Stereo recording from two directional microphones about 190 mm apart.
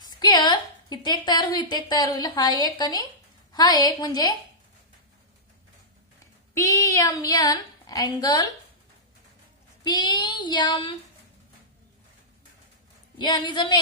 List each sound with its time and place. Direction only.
0.2 s a woman's voice: 25° left (ahead or behind)
6.5 s speech: 15° left (ahead or behind)
9.8 s speech: 20° left (ahead or behind)
13.2 s speech: 25° left (ahead or behind)